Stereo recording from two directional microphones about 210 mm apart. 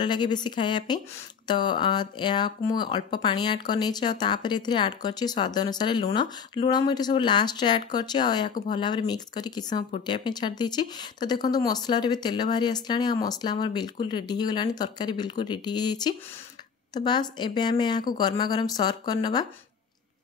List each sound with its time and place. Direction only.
0.0 s speech: 20° left (ahead or behind)